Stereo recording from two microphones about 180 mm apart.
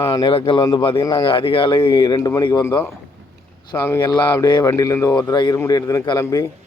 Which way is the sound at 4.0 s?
25° left (ahead or behind).